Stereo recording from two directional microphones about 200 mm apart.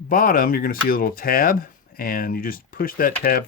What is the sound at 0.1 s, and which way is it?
Speech, 45° left (ahead or behind).